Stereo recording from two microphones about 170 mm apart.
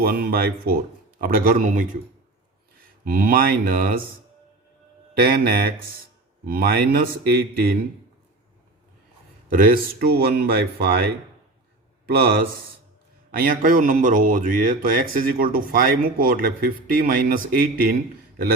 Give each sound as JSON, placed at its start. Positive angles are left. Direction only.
{"t": 0.0, "sound": "speech", "side_deg": -60}
{"t": 3.0, "sound": "speech", "side_deg": -60}
{"t": 5.2, "sound": "speech", "side_deg": -60}
{"t": 9.5, "sound": "speech", "side_deg": -55}
{"t": 13.3, "sound": "speech", "side_deg": -60}